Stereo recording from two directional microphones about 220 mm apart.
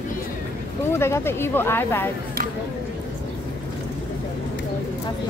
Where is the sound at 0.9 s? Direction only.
10° left (ahead or behind).